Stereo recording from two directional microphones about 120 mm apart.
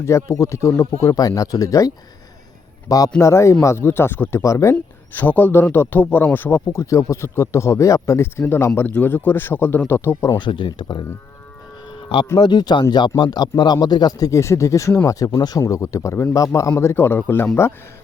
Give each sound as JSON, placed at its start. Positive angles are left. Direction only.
{"t": 0.0, "sound": "speech", "side_deg": 25}
{"t": 3.2, "sound": "speech", "side_deg": 25}
{"t": 10.3, "sound": "speech", "side_deg": 40}
{"t": 11.9, "sound": "a sound", "side_deg": 45}
{"t": 12.4, "sound": "speech", "side_deg": 40}